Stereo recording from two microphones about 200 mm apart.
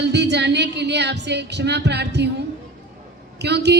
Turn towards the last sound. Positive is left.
turn(degrees=-55)  # may be behind; listen again after turning